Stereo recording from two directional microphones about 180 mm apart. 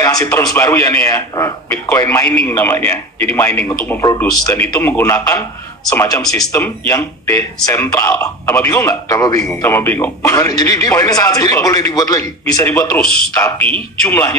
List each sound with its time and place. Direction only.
0.0 s speech: 15° left (ahead or behind)